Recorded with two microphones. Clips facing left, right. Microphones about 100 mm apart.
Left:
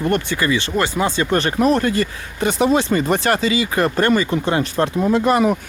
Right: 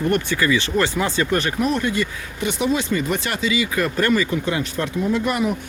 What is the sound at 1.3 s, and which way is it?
Speech, 35° left (ahead or behind).